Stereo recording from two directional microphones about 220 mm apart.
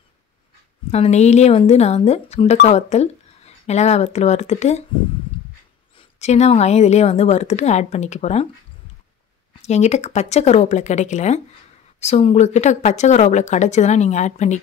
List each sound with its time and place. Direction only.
0.9 s speech: 30° left (ahead or behind)
5.9 s speech: 30° left (ahead or behind)
9.6 s speech: 30° left (ahead or behind)